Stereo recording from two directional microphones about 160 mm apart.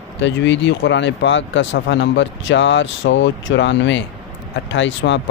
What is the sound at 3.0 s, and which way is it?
Speech, 90° left.